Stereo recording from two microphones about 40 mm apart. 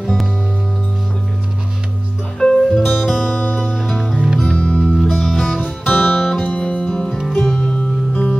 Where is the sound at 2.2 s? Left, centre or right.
Centre.